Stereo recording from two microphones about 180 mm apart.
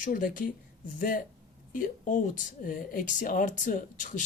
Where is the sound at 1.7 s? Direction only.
45° left (ahead or behind).